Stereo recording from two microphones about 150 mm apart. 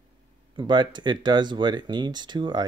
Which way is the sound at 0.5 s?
30° right (ahead or behind).